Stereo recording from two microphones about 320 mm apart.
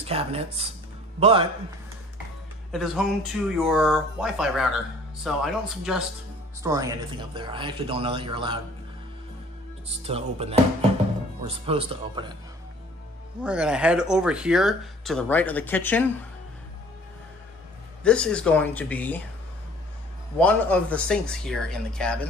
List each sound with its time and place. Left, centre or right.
0.0 s a man's voice: centre
2.7 s a man's voice: centre
10.0 s a man's voice: centre
13.4 s speech: centre
18.0 s speech: centre
20.3 s speech: centre